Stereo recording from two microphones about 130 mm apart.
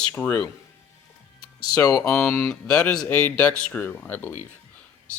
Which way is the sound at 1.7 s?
25° left (ahead or behind).